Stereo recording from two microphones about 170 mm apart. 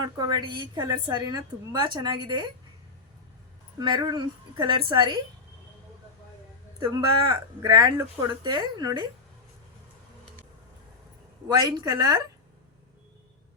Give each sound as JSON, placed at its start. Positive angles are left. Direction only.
{"t": 0.0, "sound": "a woman's voice", "side_deg": -25}
{"t": 3.8, "sound": "a woman's voice", "side_deg": -25}
{"t": 6.7, "sound": "a woman's voice", "side_deg": -25}
{"t": 11.4, "sound": "a woman's voice", "side_deg": -25}